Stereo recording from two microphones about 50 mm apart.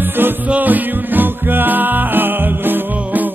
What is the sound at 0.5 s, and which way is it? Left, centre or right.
Music, right.